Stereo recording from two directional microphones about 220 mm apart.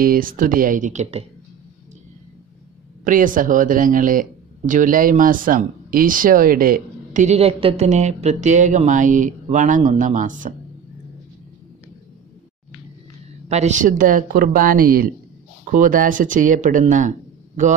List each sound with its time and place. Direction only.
0.0 s speech: 40° right (ahead or behind)
3.0 s speech: 35° right (ahead or behind)
13.5 s speech: 30° right (ahead or behind)